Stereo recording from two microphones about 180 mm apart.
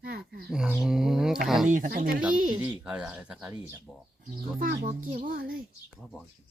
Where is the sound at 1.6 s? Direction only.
45° right (ahead or behind).